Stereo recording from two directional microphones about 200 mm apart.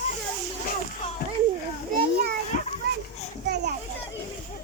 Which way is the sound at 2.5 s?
35° left (ahead or behind).